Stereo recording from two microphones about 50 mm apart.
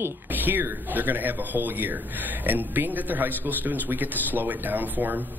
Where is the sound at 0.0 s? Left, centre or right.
Right.